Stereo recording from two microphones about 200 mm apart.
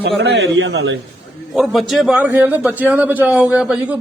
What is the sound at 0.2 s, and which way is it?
Speech, 60° right (ahead or behind).